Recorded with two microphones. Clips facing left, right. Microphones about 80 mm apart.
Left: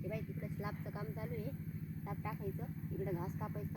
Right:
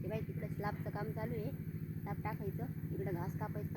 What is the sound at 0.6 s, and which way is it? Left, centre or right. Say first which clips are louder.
Speech: right 6 dB; right.